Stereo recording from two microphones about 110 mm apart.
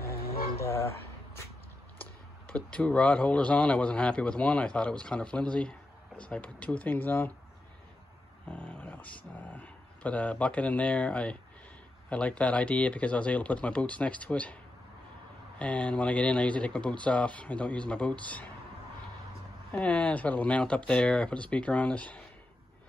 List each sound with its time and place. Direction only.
0.6 s a sound: 25° left (ahead or behind)
2.0 s speech: 10° left (ahead or behind)
8.5 s speech: 10° left (ahead or behind)
15.6 s speech: 10° left (ahead or behind)
19.7 s speech: 10° left (ahead or behind)